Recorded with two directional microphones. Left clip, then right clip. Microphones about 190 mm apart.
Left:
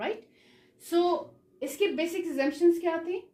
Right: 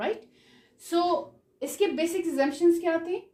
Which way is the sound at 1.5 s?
35° right (ahead or behind).